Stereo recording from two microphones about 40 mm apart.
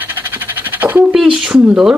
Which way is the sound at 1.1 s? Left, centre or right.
Centre.